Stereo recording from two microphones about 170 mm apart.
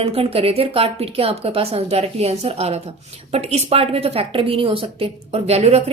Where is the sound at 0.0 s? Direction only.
35° right (ahead or behind).